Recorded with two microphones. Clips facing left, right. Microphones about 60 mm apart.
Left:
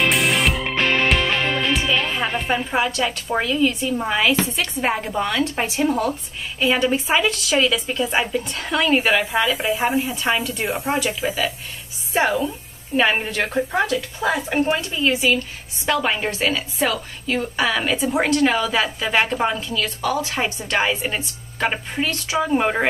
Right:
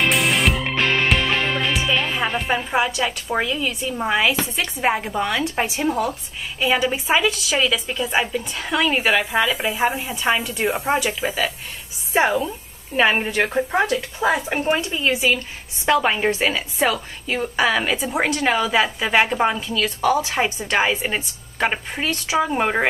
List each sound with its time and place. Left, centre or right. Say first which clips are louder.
0.0 s music: even; centre
4.6 s a woman's voice: right 1 dB; centre